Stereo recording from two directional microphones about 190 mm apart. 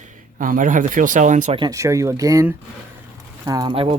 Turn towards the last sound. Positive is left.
turn(degrees=-25)  # may be behind; listen again after turning